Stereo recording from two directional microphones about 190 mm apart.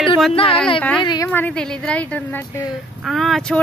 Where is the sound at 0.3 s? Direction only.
30° left (ahead or behind).